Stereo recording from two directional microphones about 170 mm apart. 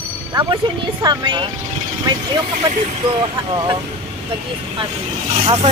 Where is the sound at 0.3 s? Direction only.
20° right (ahead or behind).